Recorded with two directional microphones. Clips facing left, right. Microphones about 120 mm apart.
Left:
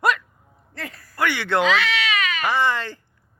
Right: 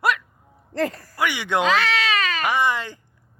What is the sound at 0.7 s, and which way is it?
Speech, 35° right (ahead or behind).